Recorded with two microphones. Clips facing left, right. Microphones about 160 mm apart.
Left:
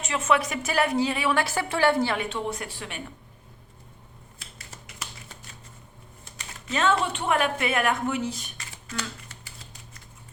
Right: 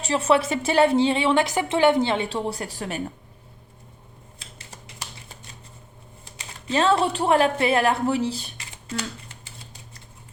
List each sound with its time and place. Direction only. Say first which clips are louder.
0.0 s a woman's voice: right 4 dB; 35° right (ahead or behind)
2.3 s speech: right 3 dB; 35° right (ahead or behind)
6.4 s speech: right 4 dB; 30° right (ahead or behind)